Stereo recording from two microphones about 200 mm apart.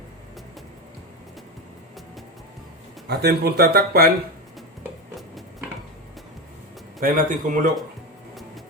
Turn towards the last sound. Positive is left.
turn(degrees=-40)  # may be behind; listen again after turning